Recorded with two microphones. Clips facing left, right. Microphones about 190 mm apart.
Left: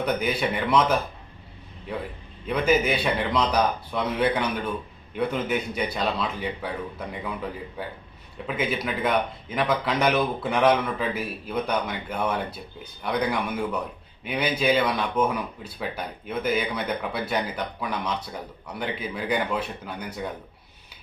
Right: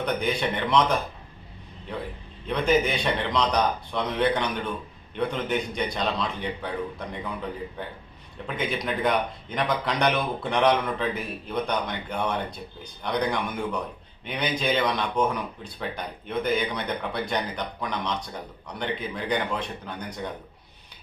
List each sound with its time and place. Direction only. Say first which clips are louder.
0.0 s speech: left 1 dB; 5° left (ahead or behind)
2.5 s speech: left 1 dB; 5° left (ahead or behind)
8.4 s speech: left 1 dB; 5° left (ahead or behind)